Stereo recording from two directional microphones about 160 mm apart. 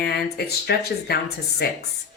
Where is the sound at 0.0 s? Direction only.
85° left.